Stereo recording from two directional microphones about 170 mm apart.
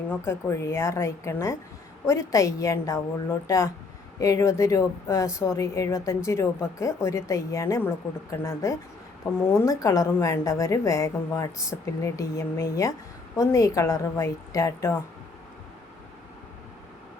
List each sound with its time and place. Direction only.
0.1 s a woman's voice: 15° left (ahead or behind)